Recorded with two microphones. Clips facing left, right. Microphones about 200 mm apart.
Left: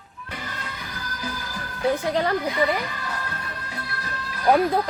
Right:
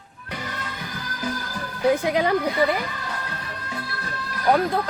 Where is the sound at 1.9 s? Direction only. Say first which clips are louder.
Right 1 dB; 10° right (ahead or behind).